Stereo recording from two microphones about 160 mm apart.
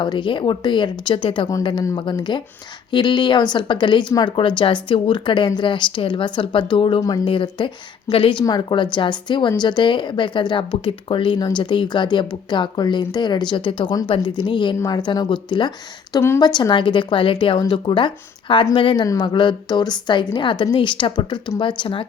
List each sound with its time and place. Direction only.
0.0 s a woman's voice: 30° left (ahead or behind)
16.1 s speech: 15° left (ahead or behind)
16.4 s a woman's voice: 25° left (ahead or behind)